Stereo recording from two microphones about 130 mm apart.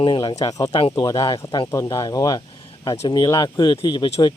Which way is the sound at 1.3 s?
40° left (ahead or behind).